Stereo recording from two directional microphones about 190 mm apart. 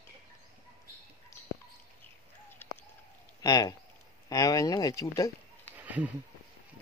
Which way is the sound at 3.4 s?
20° left (ahead or behind).